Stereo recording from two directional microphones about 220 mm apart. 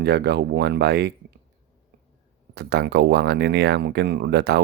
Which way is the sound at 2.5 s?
50° right (ahead or behind).